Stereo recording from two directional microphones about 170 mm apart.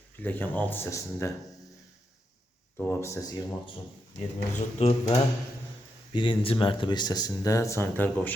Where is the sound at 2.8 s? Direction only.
15° left (ahead or behind).